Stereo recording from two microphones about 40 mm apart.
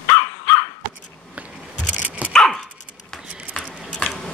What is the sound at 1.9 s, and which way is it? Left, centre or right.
Dog, right.